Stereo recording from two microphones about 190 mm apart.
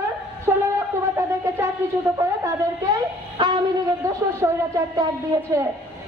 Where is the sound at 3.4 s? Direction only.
20° right (ahead or behind).